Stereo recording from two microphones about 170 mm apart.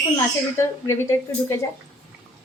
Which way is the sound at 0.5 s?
15° left (ahead or behind).